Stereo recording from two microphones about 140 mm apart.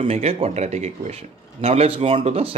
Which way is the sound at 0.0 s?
45° right (ahead or behind).